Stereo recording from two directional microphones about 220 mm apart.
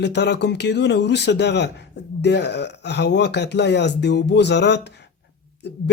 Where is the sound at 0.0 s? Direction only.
50° left (ahead or behind).